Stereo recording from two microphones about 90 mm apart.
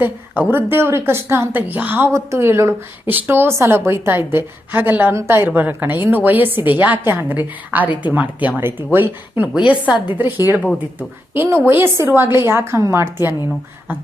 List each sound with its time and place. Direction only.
0.0 s a woman's voice: 25° right (ahead or behind)
11.4 s a woman's voice: 25° right (ahead or behind)